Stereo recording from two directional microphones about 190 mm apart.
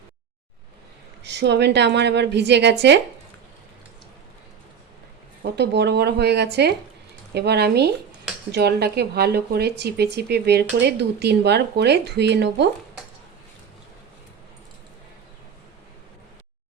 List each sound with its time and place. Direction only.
1.2 s speech: 65° right (ahead or behind)
5.4 s speech: 60° right (ahead or behind)